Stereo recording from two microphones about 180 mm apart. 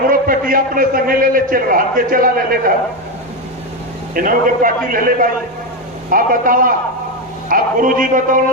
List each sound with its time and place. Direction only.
0.1 s a man's voice: 50° right (ahead or behind)
4.1 s a man's voice: 50° right (ahead or behind)